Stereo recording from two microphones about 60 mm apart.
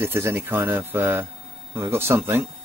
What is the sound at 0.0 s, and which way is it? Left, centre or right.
Speech, right.